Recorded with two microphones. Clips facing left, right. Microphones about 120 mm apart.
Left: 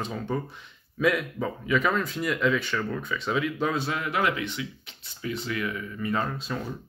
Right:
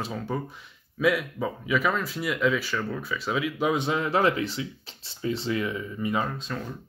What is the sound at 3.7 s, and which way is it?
Speech, 20° right (ahead or behind).